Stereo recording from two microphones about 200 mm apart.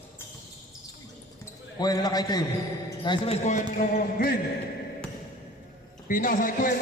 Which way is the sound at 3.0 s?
25° left (ahead or behind).